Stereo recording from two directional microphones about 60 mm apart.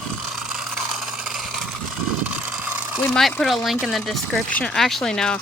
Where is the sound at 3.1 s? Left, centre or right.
Centre.